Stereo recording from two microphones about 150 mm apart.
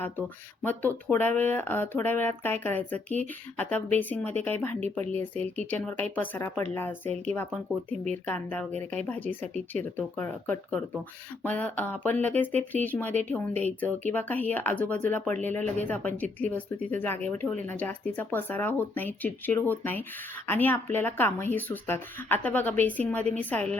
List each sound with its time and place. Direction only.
0.0 s speech: 10° left (ahead or behind)